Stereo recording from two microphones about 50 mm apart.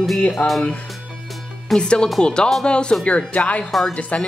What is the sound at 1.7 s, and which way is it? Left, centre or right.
Speech, centre.